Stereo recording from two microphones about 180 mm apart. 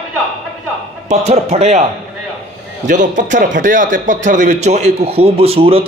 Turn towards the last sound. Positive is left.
turn(degrees=-35)  # may be behind; listen again after turning